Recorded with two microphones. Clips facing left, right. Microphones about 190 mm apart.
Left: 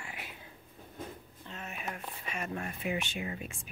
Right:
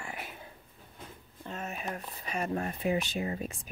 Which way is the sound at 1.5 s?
40° right (ahead or behind).